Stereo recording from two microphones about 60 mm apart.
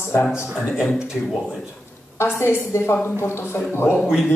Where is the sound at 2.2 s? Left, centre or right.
Left.